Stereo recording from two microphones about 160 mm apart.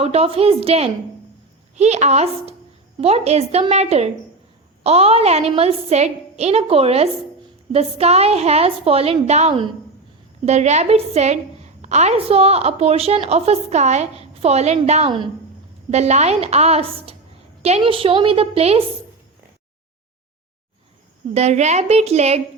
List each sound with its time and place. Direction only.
0.0 s a woman's voice: 40° right (ahead or behind)
21.3 s a woman's voice: 45° right (ahead or behind)